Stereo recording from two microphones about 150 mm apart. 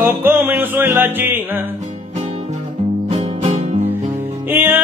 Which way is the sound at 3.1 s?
45° right (ahead or behind).